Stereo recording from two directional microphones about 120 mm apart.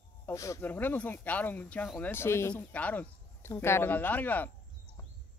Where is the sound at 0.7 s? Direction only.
15° left (ahead or behind).